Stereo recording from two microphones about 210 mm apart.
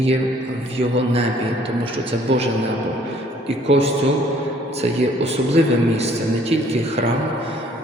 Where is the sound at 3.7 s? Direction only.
30° right (ahead or behind).